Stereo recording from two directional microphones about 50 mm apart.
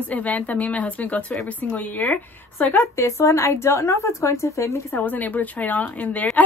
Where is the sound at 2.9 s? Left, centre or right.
Left.